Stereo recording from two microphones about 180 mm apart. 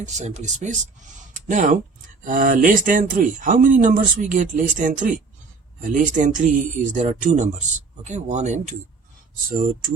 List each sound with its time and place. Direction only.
0.0 s speech: 40° right (ahead or behind)
9.5 s speech: 50° right (ahead or behind)